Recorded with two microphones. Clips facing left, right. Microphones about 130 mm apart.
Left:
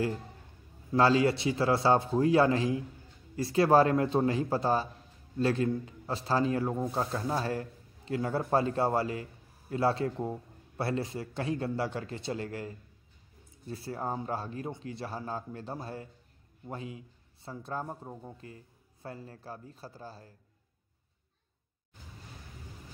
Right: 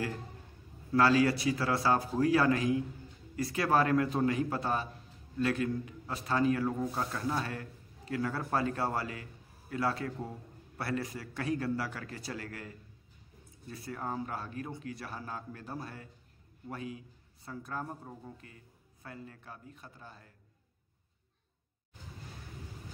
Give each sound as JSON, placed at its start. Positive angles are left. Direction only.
{"t": 0.9, "sound": "a man's voice", "side_deg": 25}